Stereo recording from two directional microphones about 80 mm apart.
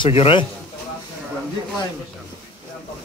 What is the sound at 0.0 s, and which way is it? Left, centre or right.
Speech, left.